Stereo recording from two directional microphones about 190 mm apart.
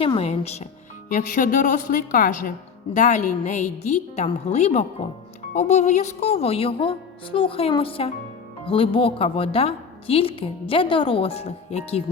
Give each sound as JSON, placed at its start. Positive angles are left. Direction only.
{"t": 0.0, "sound": "a woman's voice", "side_deg": 30}
{"t": 1.1, "sound": "a woman's voice", "side_deg": 45}